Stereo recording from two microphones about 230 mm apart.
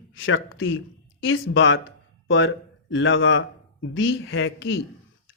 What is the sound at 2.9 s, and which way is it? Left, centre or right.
Speech, left.